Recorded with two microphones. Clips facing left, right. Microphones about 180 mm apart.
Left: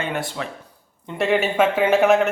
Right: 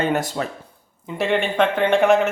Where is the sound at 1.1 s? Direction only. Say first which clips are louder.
Left 1 dB; centre (ahead or behind).